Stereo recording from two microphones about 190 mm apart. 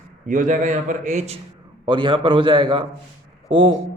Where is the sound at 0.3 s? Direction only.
45° right (ahead or behind).